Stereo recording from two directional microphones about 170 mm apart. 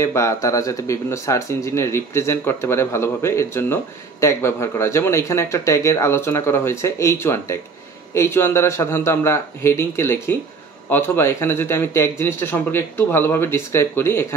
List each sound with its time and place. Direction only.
0.0 s speech: 15° left (ahead or behind)